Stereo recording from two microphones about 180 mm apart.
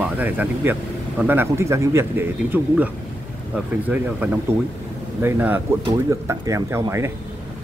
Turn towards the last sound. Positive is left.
turn(degrees=-15)  # may be behind; listen again after turning